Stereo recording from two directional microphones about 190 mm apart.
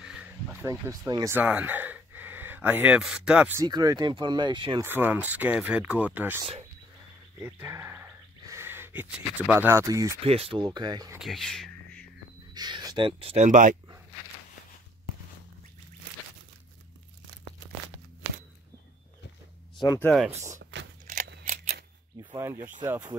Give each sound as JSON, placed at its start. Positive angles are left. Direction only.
{"t": 0.0, "sound": "a sound", "side_deg": -5}
{"t": 3.6, "sound": "speech", "side_deg": -20}
{"t": 4.8, "sound": "speech", "side_deg": -10}
{"t": 7.3, "sound": "a sound", "side_deg": -10}
{"t": 9.5, "sound": "speech", "side_deg": -10}
{"t": 10.2, "sound": "speech", "side_deg": -30}
{"t": 11.1, "sound": "a sound", "side_deg": 0}
{"t": 12.5, "sound": "speech", "side_deg": -20}
{"t": 20.0, "sound": "speech", "side_deg": 5}
{"t": 20.7, "sound": "biting", "side_deg": -70}
{"t": 21.3, "sound": "scissors", "side_deg": -55}
{"t": 22.2, "sound": "speech", "side_deg": -15}